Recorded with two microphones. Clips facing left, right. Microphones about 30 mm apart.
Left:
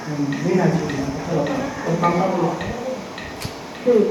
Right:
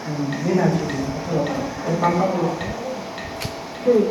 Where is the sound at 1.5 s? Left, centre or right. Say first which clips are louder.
Left 2 dB; left.